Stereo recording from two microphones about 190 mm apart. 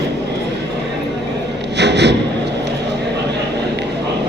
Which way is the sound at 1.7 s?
65° right (ahead or behind).